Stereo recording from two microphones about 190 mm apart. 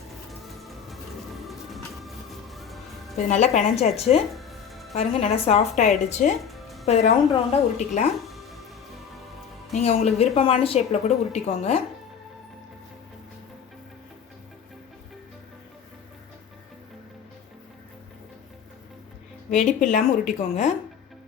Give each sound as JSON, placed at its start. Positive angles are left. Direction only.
{"t": 0.3, "sound": "music", "side_deg": 0}
{"t": 3.2, "sound": "a woman's voice", "side_deg": 40}
{"t": 4.4, "sound": "music", "side_deg": 0}
{"t": 4.9, "sound": "a woman's voice", "side_deg": 35}
{"t": 6.4, "sound": "music", "side_deg": 0}
{"t": 6.8, "sound": "a woman's voice", "side_deg": 35}
{"t": 9.7, "sound": "a woman's voice", "side_deg": 35}
{"t": 19.5, "sound": "a woman's voice", "side_deg": 40}